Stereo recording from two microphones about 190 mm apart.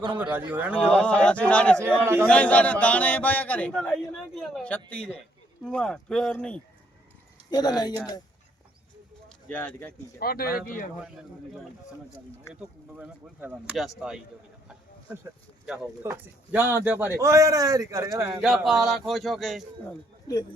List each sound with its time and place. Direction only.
0.5 s speech: 10° right (ahead or behind)
0.9 s a man's voice: 5° left (ahead or behind)
1.8 s speech: 15° right (ahead or behind)
2.2 s a man's voice: 5° left (ahead or behind)
7.5 s speech: 20° left (ahead or behind)
9.5 s speech: 10° left (ahead or behind)
10.2 s speech: 55° left (ahead or behind)
12.5 s speech: 10° right (ahead or behind)
18.4 s a man's voice: centre (ahead or behind)